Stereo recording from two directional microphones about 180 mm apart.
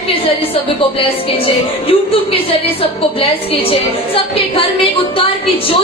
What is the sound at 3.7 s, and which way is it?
A woman's voice, 30° left (ahead or behind).